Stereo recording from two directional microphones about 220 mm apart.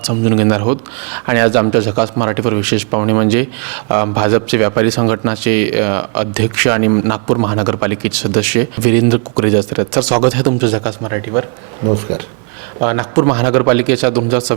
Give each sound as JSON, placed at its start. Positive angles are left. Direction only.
{"t": 0.1, "sound": "speech", "side_deg": -15}
{"t": 12.8, "sound": "speech", "side_deg": -20}
{"t": 14.1, "sound": "speech", "side_deg": -25}